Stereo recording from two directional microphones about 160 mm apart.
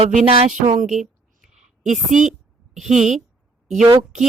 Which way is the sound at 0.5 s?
55° right (ahead or behind).